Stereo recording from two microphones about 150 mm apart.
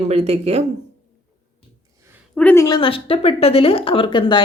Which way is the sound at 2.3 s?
10° left (ahead or behind).